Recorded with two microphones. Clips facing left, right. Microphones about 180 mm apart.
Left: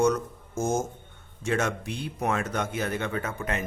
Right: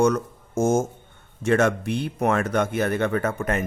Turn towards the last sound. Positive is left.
turn(degrees=-50)  # may be behind; listen again after turning